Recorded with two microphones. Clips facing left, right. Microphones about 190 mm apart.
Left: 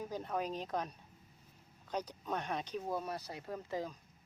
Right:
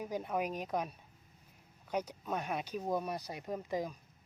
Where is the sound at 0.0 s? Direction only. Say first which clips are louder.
Right 2 dB; 10° right (ahead or behind).